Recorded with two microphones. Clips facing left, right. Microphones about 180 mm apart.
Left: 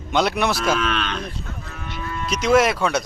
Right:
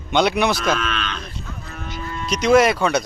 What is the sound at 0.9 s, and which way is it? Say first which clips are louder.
Speech: left 3 dB; 55° left (ahead or behind).